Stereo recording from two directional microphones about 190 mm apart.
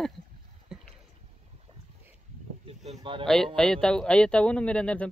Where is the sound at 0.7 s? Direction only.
Centre (ahead or behind).